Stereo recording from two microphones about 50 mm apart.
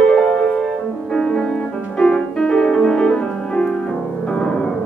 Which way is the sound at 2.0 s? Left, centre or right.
Centre.